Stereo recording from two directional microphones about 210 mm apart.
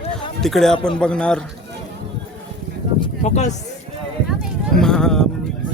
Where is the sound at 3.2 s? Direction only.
35° left (ahead or behind).